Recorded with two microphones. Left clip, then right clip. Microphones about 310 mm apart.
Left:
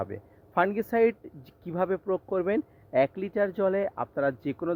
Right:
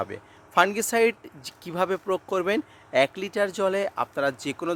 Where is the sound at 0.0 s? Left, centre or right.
Centre.